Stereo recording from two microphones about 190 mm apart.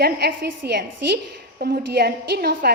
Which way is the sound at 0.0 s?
55° right (ahead or behind).